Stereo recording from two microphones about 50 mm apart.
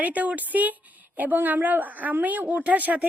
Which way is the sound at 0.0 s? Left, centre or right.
Right.